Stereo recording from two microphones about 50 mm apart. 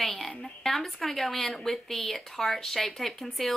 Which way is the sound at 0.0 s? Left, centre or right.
Centre.